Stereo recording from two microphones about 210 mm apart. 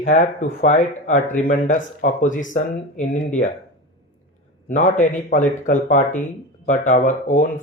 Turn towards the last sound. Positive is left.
turn(degrees=35)  # may be behind; listen again after turning